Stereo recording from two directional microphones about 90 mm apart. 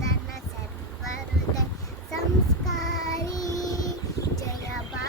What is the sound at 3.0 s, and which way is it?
Child singing, 40° left (ahead or behind).